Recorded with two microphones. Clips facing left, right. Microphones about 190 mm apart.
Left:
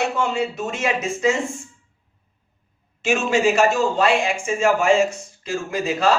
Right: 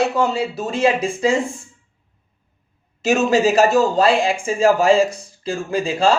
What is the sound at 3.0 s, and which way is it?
Speech, 35° right (ahead or behind).